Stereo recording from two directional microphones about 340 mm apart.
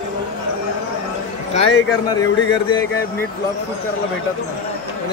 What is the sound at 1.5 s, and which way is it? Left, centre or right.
Speech, left.